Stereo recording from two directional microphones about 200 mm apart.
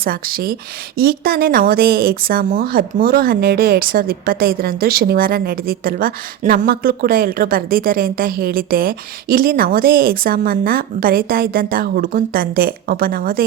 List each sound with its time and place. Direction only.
0.0 s speech: 45° right (ahead or behind)